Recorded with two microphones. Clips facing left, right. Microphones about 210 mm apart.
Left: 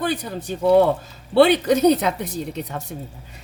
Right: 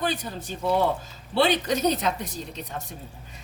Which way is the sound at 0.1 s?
60° left (ahead or behind).